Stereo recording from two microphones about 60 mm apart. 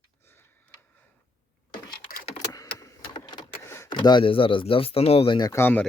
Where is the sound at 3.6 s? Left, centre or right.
Left.